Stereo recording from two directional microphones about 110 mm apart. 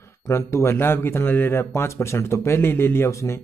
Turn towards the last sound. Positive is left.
turn(degrees=25)  # may be behind; listen again after turning